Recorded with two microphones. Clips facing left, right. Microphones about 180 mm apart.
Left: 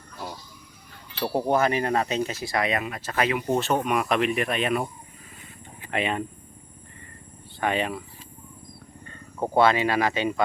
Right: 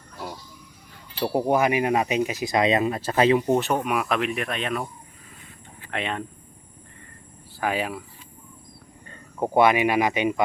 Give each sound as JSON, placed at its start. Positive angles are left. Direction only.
{"t": 1.3, "sound": "speech", "side_deg": -15}
{"t": 3.5, "sound": "speech", "side_deg": -15}
{"t": 5.9, "sound": "speech", "side_deg": 5}
{"t": 7.6, "sound": "speech", "side_deg": -5}
{"t": 9.4, "sound": "speech", "side_deg": -15}